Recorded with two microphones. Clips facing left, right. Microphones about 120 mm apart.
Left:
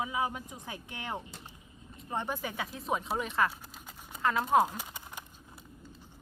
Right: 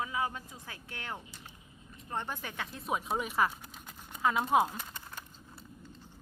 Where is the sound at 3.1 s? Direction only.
10° right (ahead or behind).